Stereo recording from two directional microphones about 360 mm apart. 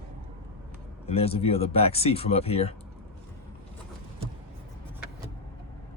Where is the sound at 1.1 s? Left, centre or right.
Centre.